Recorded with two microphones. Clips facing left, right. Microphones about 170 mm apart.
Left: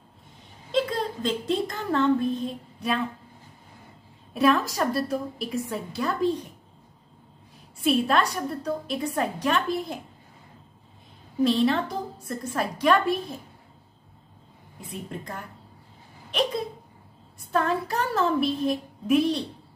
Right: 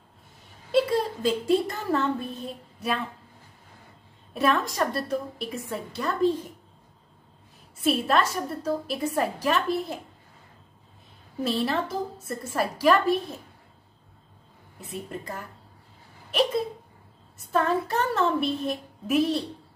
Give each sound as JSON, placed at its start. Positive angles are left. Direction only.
{"t": 0.7, "sound": "a woman's voice", "side_deg": -10}
{"t": 4.3, "sound": "a woman's voice", "side_deg": 0}
{"t": 7.8, "sound": "a woman's voice", "side_deg": 0}
{"t": 11.4, "sound": "a woman's voice", "side_deg": -5}
{"t": 14.8, "sound": "a woman's voice", "side_deg": -5}
{"t": 16.3, "sound": "a sound", "side_deg": -5}
{"t": 17.4, "sound": "a woman's voice", "side_deg": 0}